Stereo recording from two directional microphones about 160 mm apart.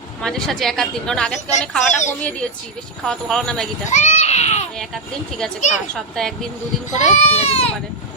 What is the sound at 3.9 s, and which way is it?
Speech, 45° left (ahead or behind).